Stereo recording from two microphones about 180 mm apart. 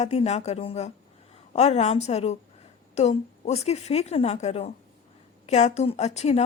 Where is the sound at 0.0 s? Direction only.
35° left (ahead or behind).